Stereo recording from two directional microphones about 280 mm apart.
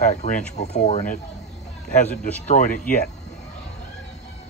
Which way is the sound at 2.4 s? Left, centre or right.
Left.